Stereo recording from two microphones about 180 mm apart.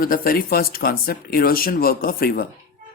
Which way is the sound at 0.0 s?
50° left (ahead or behind).